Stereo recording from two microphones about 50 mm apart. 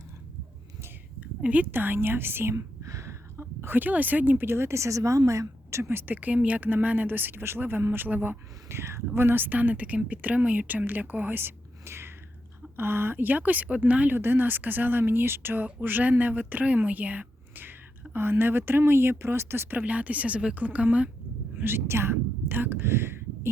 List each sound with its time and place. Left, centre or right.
1.5 s speech: right
1.7 s speech: right
2.6 s whispering: right
3.3 s speech: right
4.4 s a woman's voice: right
6.1 s speech: right
8.0 s speech: right
8.7 s speech: right
14.2 s speech: right
19.8 s speech: right
21.5 s speech: right